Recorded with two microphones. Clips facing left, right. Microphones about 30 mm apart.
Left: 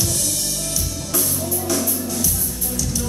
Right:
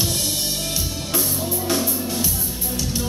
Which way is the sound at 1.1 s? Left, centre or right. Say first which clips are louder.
Even; right.